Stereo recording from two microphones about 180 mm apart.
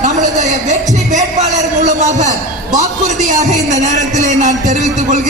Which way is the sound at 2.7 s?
40° right (ahead or behind).